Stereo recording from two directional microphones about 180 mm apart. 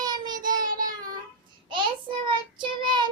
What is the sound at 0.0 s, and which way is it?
Child singing, 25° right (ahead or behind).